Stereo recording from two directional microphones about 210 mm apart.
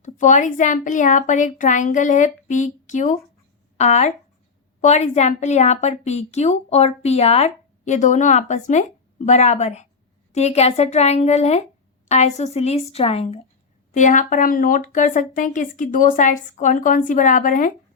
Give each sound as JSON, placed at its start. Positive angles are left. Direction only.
{"t": 0.0, "sound": "a woman's voice", "side_deg": 35}